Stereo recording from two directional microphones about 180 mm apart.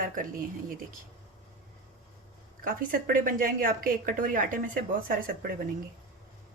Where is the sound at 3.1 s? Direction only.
50° right (ahead or behind).